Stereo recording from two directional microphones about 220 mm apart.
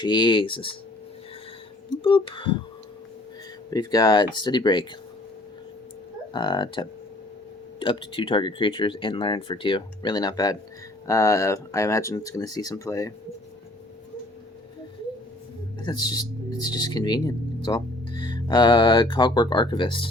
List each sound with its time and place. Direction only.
0.0 s speech: 20° left (ahead or behind)
2.0 s speech: 20° left (ahead or behind)
3.7 s speech: 15° left (ahead or behind)
6.3 s speech: 20° left (ahead or behind)
15.9 s speech: 15° left (ahead or behind)